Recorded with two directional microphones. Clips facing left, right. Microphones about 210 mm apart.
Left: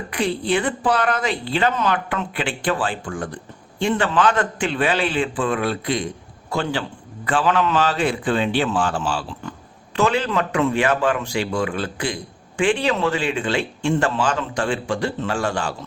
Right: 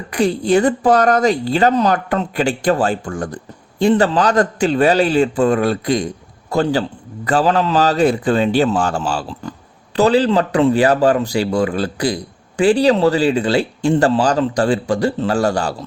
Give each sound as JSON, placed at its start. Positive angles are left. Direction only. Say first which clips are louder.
{"t": 0.1, "sound": "a man's voice", "louder": "right 7 dB", "side_deg": -40}